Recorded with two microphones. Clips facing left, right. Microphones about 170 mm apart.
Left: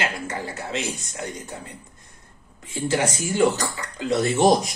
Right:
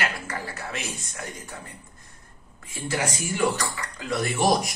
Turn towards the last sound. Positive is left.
turn(degrees=20)  # may be behind; listen again after turning